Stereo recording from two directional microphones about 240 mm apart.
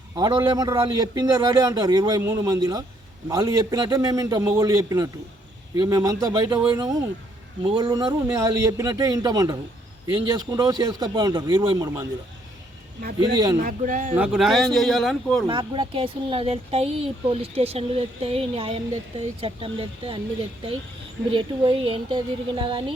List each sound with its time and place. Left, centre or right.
0.2 s a man's voice: centre
13.6 s speech: right
14.2 s a man's voice: centre
15.4 s speech: centre